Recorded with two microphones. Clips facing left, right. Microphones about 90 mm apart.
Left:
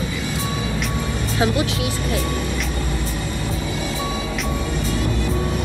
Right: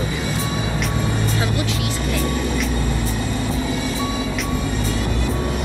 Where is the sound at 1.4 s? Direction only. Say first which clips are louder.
Left 3 dB; 20° left (ahead or behind).